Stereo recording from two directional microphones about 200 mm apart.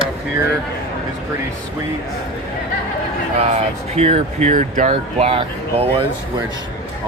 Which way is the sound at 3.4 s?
35° right (ahead or behind).